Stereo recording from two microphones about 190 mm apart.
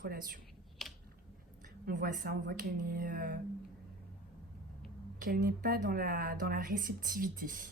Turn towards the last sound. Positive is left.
turn(degrees=-45)  # may be behind; listen again after turning